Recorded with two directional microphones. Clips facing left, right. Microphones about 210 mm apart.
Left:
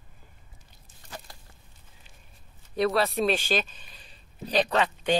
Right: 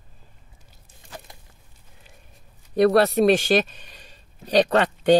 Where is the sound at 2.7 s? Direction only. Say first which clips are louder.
Right 8 dB; 50° right (ahead or behind).